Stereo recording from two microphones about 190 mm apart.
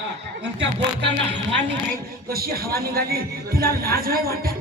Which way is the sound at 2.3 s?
50° right (ahead or behind).